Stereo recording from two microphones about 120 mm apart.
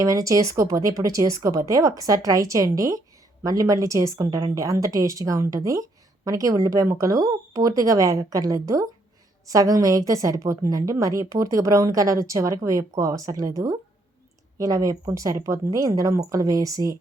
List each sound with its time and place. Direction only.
0.0 s speech: 30° right (ahead or behind)
14.6 s speech: 30° right (ahead or behind)